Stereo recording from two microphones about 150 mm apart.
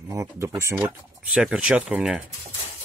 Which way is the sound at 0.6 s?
15° right (ahead or behind).